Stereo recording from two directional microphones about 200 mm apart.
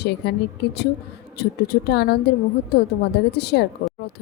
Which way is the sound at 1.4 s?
55° left (ahead or behind).